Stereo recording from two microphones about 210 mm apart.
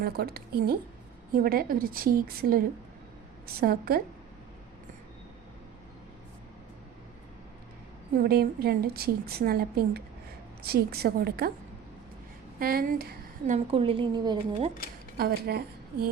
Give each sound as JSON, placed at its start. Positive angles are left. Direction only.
{"t": 0.0, "sound": "a woman's voice", "side_deg": -45}
{"t": 8.2, "sound": "a woman's voice", "side_deg": -50}
{"t": 12.5, "sound": "speech", "side_deg": -45}
{"t": 13.7, "sound": "speech", "side_deg": -25}
{"t": 15.2, "sound": "a woman's voice", "side_deg": -50}